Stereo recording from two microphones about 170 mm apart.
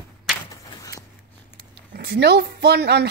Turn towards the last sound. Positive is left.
turn(degrees=-75)  # may be behind; listen again after turning